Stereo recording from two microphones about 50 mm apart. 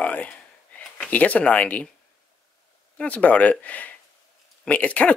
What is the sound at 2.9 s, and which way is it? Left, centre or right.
Speech, left.